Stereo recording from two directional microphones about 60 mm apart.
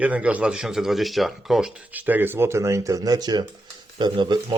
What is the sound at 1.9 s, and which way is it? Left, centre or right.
Speech, right.